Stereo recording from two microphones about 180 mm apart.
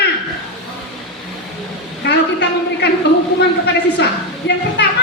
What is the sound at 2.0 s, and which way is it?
A woman's voice, 75° left (ahead or behind).